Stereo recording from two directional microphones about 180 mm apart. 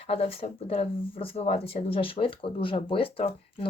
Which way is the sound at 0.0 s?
35° left (ahead or behind).